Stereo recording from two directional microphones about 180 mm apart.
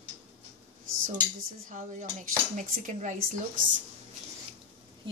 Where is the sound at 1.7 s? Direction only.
45° right (ahead or behind).